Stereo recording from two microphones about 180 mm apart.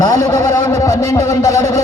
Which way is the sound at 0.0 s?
20° left (ahead or behind).